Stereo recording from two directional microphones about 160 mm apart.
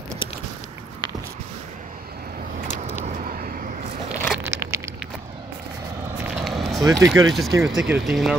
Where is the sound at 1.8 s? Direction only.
60° right (ahead or behind).